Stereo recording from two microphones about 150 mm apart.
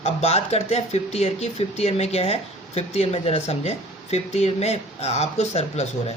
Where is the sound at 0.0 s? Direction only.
45° left (ahead or behind).